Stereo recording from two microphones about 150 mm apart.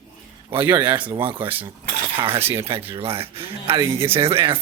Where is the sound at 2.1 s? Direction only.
40° right (ahead or behind).